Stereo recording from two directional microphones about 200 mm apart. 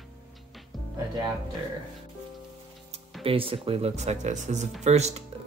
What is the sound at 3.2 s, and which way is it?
Speech, 25° right (ahead or behind).